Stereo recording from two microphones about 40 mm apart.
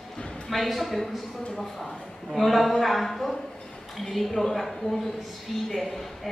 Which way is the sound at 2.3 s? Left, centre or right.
Centre.